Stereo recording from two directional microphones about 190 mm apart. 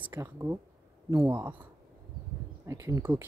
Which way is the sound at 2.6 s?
15° right (ahead or behind).